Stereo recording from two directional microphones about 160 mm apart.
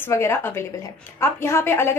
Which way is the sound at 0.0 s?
15° left (ahead or behind).